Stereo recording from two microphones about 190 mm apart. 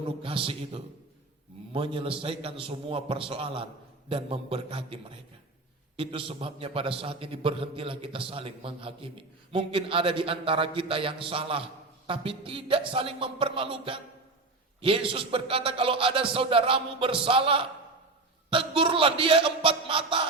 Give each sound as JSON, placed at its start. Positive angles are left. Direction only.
{"t": 0.2, "sound": "a man's voice", "side_deg": -30}
{"t": 6.0, "sound": "a man's voice", "side_deg": -30}